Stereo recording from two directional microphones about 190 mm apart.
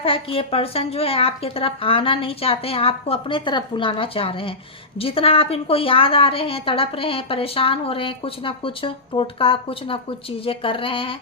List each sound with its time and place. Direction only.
0.0 s a woman's voice: 30° left (ahead or behind)